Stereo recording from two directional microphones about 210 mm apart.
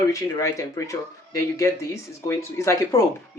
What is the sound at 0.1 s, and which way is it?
Speech, 15° left (ahead or behind).